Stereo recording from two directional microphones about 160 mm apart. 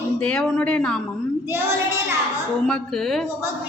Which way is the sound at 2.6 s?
5° left (ahead or behind).